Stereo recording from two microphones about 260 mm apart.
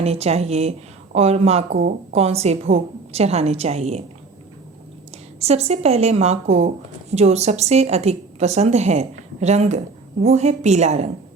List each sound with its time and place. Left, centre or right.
0.0 s a woman's voice: right
5.4 s a woman's voice: right